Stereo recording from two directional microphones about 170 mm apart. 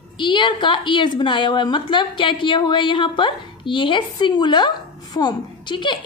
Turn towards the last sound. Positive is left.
turn(degrees=25)  # may be behind; listen again after turning